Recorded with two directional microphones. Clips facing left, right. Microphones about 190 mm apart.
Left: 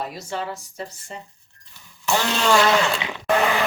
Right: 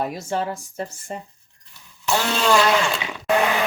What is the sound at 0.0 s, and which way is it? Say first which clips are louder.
Speech: right 4 dB; 50° right (ahead or behind).